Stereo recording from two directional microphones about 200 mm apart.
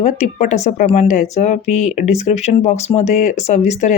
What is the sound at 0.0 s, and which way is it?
Speech, 35° left (ahead or behind).